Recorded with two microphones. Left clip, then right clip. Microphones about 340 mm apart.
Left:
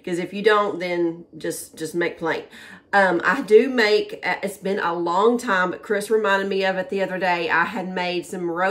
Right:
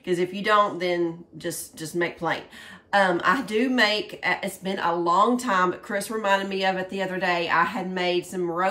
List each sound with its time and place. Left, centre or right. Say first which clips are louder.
0.0 s speech: left 4 dB; centre